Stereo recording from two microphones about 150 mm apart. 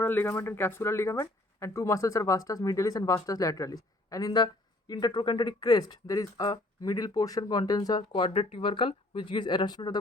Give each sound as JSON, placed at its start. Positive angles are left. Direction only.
{"t": 0.0, "sound": "speech", "side_deg": 15}